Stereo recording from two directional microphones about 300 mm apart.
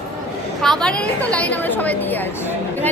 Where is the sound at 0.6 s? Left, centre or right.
Centre.